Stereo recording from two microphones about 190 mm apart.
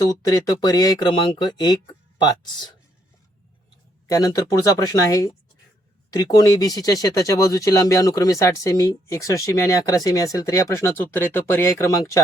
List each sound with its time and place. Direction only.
0.0 s speech: 20° left (ahead or behind)
4.1 s speech: 20° left (ahead or behind)